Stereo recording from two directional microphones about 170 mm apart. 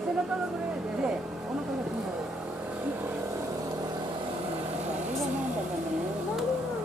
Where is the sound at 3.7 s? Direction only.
25° right (ahead or behind).